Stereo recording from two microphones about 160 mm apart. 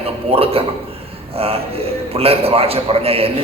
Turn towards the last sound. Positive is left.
turn(degrees=-35)  # may be behind; listen again after turning